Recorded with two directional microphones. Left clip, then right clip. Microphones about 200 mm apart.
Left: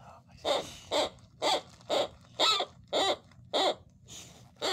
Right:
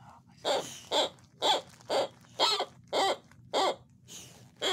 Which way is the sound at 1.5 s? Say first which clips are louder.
Even; 10° right (ahead or behind).